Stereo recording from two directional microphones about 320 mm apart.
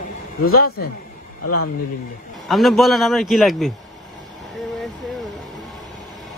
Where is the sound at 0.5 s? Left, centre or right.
Left.